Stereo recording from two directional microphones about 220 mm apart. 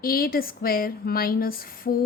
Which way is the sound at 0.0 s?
40° left (ahead or behind).